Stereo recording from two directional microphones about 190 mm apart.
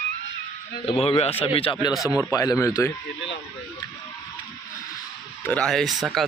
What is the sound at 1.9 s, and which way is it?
Speech, 5° right (ahead or behind).